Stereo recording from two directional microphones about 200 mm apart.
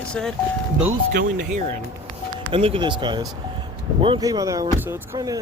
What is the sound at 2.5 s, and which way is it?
Speech, 25° right (ahead or behind).